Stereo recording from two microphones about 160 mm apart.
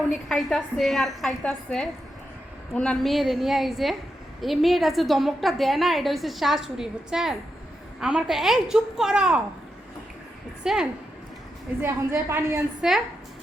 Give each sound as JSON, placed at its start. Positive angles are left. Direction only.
{"t": 0.3, "sound": "a woman's voice", "side_deg": 0}
{"t": 10.6, "sound": "a woman's voice", "side_deg": -5}
{"t": 11.8, "sound": "a woman's voice", "side_deg": -15}